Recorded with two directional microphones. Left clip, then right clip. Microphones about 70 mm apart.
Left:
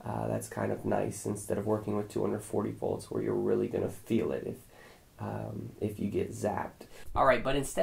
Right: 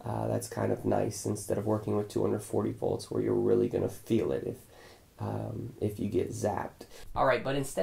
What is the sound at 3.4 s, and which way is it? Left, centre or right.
Speech, right.